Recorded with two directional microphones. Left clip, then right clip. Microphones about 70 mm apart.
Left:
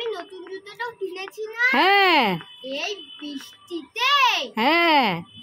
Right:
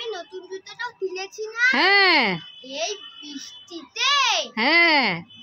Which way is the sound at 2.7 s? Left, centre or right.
Right.